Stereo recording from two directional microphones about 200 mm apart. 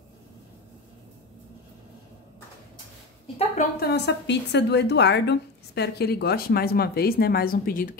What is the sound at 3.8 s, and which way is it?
A woman's voice, 60° left (ahead or behind).